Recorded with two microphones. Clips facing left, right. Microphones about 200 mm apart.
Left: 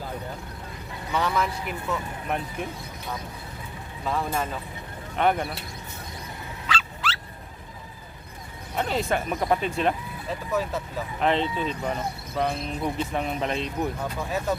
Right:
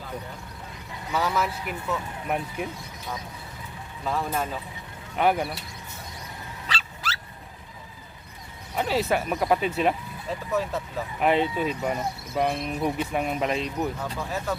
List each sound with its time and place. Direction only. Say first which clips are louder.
1.1 s speech: even; 5° right (ahead or behind)
4.0 s speech: even; centre (ahead or behind)
6.7 s dog: left 5 dB; 40° right (ahead or behind)
8.7 s speech: right 1 dB; 5° right (ahead or behind)
11.2 s speech: right 2 dB; 10° right (ahead or behind)